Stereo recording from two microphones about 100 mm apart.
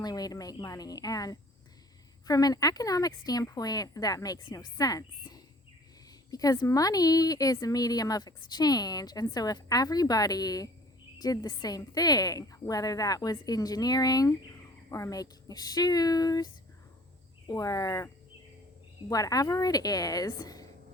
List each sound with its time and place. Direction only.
0.0 s speech: 40° left (ahead or behind)
17.5 s speech: 35° left (ahead or behind)